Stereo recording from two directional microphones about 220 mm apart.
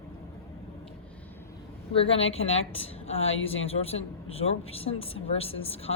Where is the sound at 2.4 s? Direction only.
65° left (ahead or behind).